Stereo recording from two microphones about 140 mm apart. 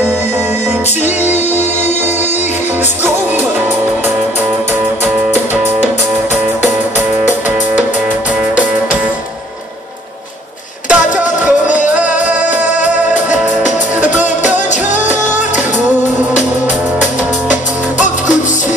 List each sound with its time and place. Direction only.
1.0 s music: 55° left (ahead or behind)
5.0 s music: 15° right (ahead or behind)
10.9 s music: 10° right (ahead or behind)
12.4 s music: 60° left (ahead or behind)
13.3 s music: 10° right (ahead or behind)
14.7 s music: 60° left (ahead or behind)
15.0 s music: 10° right (ahead or behind)